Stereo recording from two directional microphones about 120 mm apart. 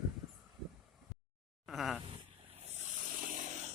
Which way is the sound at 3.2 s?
90° right.